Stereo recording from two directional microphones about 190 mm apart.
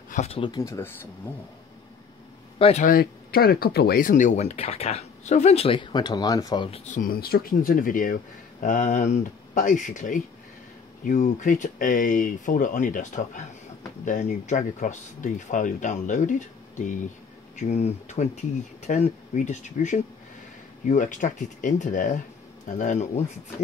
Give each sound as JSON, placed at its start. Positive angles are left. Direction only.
{"t": 0.1, "sound": "speech", "side_deg": 35}
{"t": 2.6, "sound": "speech", "side_deg": 35}
{"t": 2.9, "sound": "speech", "side_deg": 50}